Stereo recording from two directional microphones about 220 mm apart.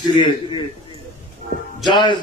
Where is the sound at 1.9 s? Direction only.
20° left (ahead or behind).